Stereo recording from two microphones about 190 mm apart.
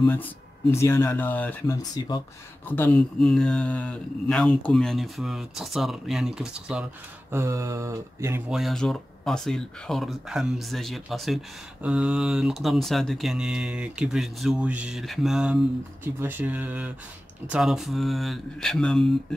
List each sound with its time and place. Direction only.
0.0 s speech: 10° left (ahead or behind); by 8.5 s 15° right (ahead or behind)
8.5 s speech: centre (ahead or behind)